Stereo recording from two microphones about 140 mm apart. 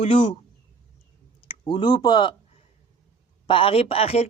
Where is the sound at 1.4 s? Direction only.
35° left (ahead or behind).